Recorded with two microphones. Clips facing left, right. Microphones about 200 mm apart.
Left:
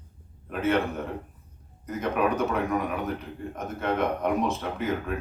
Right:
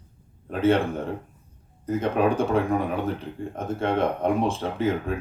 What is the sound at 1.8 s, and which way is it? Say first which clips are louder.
A man's voice: right 4 dB; 30° right (ahead or behind).